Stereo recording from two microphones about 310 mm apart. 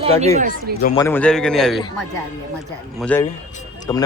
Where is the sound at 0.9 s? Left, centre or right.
Centre.